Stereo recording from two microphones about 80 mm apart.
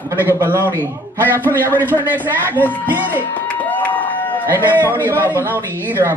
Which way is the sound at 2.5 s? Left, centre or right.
Left.